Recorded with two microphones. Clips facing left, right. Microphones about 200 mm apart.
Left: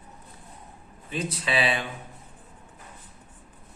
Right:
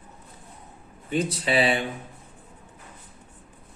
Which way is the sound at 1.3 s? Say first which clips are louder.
Right 2 dB; 30° right (ahead or behind).